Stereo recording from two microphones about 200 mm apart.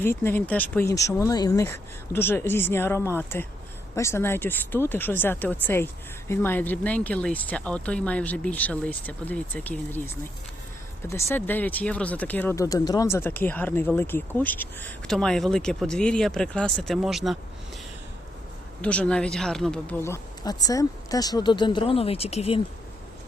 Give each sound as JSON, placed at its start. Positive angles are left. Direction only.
{"t": 0.0, "sound": "speech", "side_deg": 10}
{"t": 11.1, "sound": "speech", "side_deg": 10}
{"t": 18.8, "sound": "speech", "side_deg": 5}